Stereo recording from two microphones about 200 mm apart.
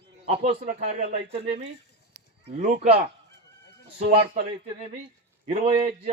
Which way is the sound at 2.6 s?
40° right (ahead or behind).